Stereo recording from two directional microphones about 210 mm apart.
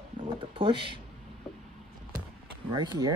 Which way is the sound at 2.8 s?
20° right (ahead or behind).